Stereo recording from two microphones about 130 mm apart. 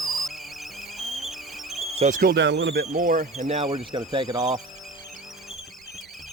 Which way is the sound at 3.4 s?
65° right (ahead or behind).